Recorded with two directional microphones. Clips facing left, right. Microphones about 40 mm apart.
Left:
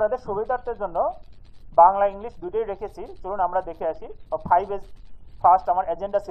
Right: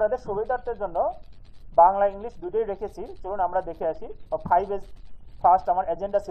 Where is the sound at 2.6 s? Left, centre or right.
Centre.